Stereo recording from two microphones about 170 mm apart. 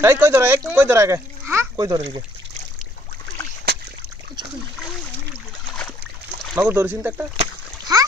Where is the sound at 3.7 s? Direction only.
70° right (ahead or behind).